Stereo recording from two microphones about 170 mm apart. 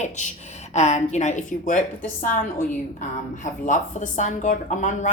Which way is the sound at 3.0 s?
50° left (ahead or behind).